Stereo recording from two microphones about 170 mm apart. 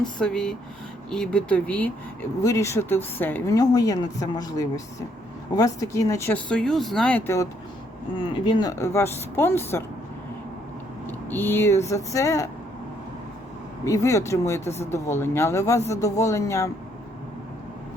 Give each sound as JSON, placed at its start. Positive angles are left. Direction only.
{"t": 0.2, "sound": "speech", "side_deg": 5}
{"t": 2.4, "sound": "speech", "side_deg": 20}
{"t": 8.1, "sound": "speech", "side_deg": 30}
{"t": 8.8, "sound": "speech", "side_deg": 15}
{"t": 11.3, "sound": "speech", "side_deg": 10}
{"t": 13.8, "sound": "speech", "side_deg": 20}
{"t": 14.6, "sound": "speech", "side_deg": 40}
{"t": 14.8, "sound": "speech", "side_deg": 15}